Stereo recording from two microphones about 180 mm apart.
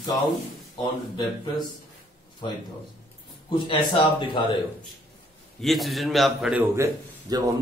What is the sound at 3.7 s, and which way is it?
Speech, 30° left (ahead or behind).